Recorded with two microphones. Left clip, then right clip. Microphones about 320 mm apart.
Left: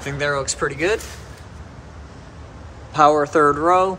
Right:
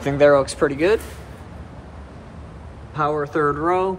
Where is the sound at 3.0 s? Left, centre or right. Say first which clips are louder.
Left 7 dB; centre.